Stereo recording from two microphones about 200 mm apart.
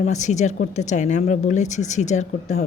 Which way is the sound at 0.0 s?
35° left (ahead or behind).